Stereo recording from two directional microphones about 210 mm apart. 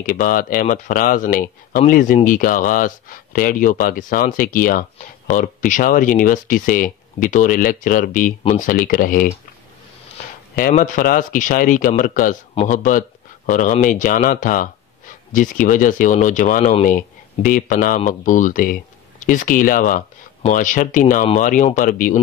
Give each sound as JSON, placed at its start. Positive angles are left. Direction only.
{"t": 0.0, "sound": "speech", "side_deg": 40}
{"t": 10.5, "sound": "speech", "side_deg": 40}